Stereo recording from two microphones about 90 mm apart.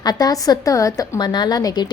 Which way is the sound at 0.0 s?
45° left (ahead or behind).